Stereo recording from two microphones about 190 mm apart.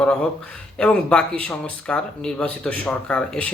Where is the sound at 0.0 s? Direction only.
5° left (ahead or behind).